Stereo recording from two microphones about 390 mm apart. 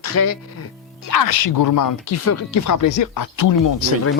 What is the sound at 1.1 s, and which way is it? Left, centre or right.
Speech, left.